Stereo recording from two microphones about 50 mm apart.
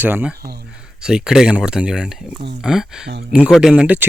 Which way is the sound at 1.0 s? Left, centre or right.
Centre.